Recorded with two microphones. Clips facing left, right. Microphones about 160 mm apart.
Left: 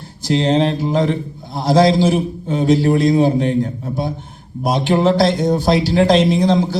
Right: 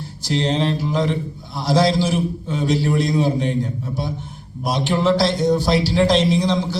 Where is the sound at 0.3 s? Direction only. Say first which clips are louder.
Left 5 dB; 50° left (ahead or behind).